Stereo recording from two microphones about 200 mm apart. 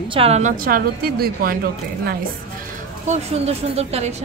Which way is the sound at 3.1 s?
30° right (ahead or behind).